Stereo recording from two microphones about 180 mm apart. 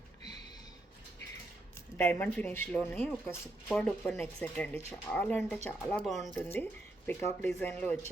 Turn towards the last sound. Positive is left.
turn(degrees=10)  # may be behind; listen again after turning